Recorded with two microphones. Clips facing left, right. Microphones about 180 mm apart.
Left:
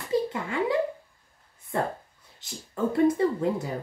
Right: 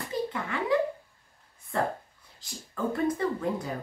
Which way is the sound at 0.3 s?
25° left (ahead or behind).